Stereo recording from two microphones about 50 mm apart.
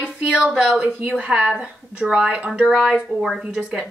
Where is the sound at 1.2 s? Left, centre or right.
Right.